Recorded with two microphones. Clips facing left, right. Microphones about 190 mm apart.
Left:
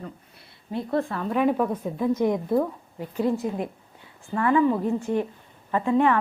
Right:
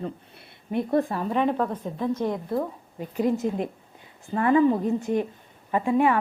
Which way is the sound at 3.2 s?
20° right (ahead or behind).